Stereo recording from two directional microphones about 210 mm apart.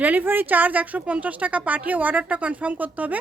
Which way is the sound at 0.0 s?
10° right (ahead or behind).